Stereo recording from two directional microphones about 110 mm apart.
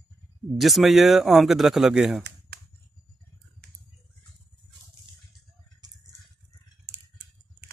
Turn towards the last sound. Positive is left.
turn(degrees=-40)  # may be behind; listen again after turning